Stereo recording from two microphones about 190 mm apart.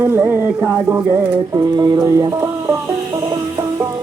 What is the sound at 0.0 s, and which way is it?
Music, 10° right (ahead or behind).